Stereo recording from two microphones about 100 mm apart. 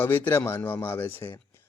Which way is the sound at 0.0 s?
20° left (ahead or behind).